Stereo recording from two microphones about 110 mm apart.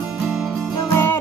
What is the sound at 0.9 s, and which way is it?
Music, 20° left (ahead or behind).